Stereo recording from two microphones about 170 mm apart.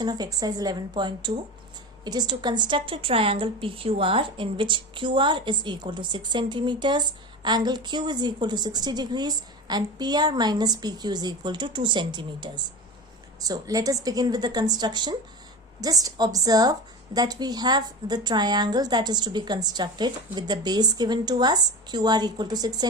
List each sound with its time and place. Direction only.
0.0 s a woman's voice: 25° right (ahead or behind)